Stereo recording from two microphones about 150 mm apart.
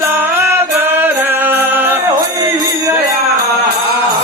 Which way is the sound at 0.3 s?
15° right (ahead or behind).